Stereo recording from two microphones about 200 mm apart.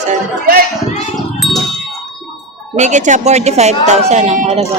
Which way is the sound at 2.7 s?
35° right (ahead or behind).